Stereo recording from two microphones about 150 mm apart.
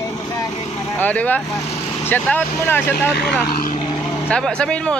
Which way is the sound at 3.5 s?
80° left.